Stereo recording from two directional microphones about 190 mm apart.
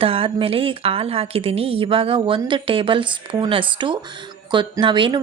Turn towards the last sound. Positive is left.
turn(degrees=-25)  # may be behind; listen again after turning